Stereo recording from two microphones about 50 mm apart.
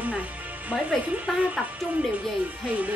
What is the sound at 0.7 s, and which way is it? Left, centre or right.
Speech, right.